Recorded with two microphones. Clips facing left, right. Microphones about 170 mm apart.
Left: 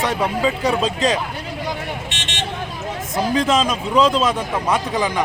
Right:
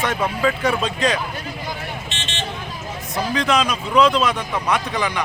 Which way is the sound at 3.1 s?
25° left (ahead or behind).